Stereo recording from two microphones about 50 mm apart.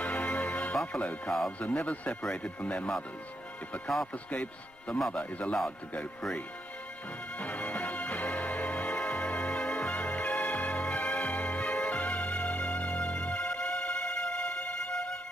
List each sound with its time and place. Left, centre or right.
0.0 s music: left
0.9 s speech: centre
1.6 s speech: left
4.3 s speech: left
7.3 s music: left